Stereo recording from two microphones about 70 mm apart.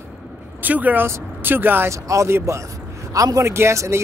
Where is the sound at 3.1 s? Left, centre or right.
Right.